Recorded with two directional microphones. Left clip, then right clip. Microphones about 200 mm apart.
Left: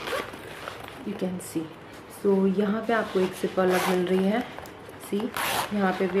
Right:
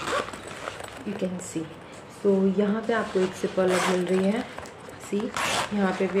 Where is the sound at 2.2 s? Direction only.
15° left (ahead or behind).